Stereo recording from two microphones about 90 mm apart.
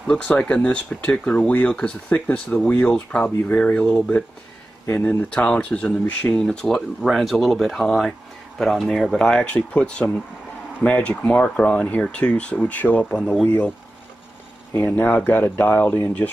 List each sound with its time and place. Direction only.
0.0 s speech: 15° left (ahead or behind)
13.2 s speech: 5° left (ahead or behind)
14.7 s speech: 20° left (ahead or behind)